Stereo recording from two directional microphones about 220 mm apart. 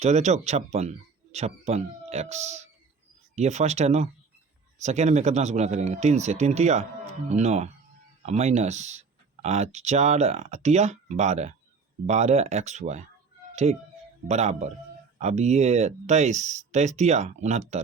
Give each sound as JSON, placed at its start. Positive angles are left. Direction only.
{"t": 0.0, "sound": "speech", "side_deg": -30}